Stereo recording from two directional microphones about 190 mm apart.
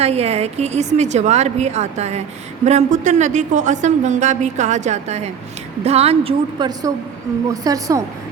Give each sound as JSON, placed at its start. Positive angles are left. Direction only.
{"t": 0.0, "sound": "a woman's voice", "side_deg": -35}